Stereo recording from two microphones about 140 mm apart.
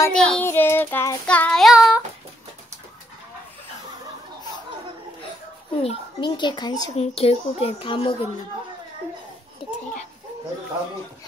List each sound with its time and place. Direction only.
0.1 s child singing: 5° left (ahead or behind)
0.5 s child singing: 15° left (ahead or behind); by 2.0 s 5° right (ahead or behind)
5.8 s a child's voice: 40° left (ahead or behind)
7.0 s speech: 45° left (ahead or behind)
9.6 s a child's voice: 40° left (ahead or behind)